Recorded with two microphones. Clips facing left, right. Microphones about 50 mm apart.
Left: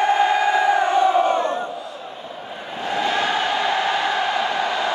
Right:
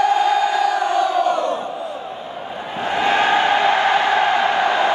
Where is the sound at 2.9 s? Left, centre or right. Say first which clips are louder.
Right 5 dB; right.